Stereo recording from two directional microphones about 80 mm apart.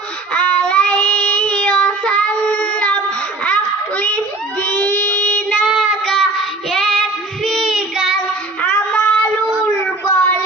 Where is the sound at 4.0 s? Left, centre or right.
Centre.